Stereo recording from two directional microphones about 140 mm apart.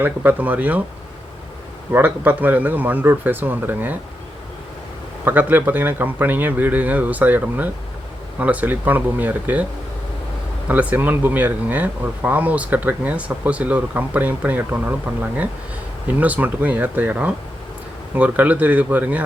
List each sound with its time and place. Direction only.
0.0 s speech: 15° right (ahead or behind)
1.9 s speech: 15° right (ahead or behind)
5.2 s speech: 15° right (ahead or behind)
10.7 s speech: 10° right (ahead or behind)
16.2 s speech: 10° right (ahead or behind)